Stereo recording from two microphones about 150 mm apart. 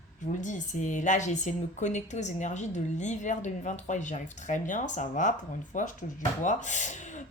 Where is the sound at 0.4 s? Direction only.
55° left (ahead or behind).